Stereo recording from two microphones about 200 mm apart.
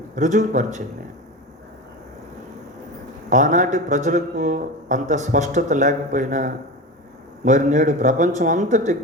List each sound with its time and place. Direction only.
0.2 s a man's voice: 40° right (ahead or behind)
3.2 s a man's voice: 40° right (ahead or behind)